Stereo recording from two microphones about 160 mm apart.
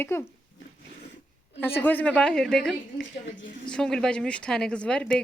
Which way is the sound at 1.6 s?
10° left (ahead or behind).